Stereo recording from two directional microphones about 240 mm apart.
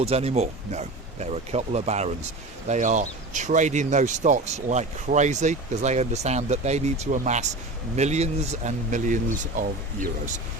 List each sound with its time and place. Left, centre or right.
0.0 s speech: right